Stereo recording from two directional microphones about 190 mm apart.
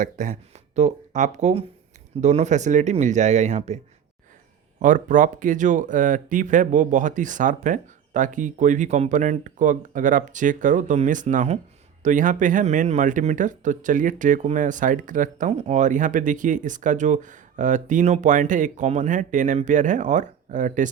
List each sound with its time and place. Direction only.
0.0 s speech: 40° right (ahead or behind)
4.8 s speech: 40° right (ahead or behind)